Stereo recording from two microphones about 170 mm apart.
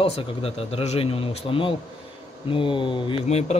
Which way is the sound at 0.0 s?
35° left (ahead or behind).